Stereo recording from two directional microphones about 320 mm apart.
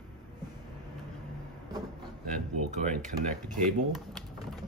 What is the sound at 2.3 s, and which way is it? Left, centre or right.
Speech, right.